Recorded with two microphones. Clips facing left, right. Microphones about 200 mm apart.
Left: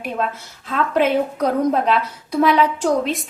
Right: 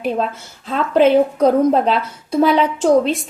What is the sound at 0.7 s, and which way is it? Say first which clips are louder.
A woman's voice: right 5 dB; 30° right (ahead or behind).